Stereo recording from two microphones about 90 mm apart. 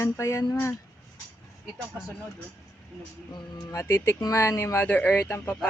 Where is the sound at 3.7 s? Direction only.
30° left (ahead or behind).